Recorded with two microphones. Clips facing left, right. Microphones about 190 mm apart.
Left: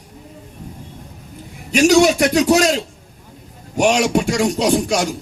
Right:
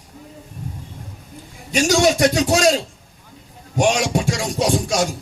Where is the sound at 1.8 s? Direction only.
65° left (ahead or behind).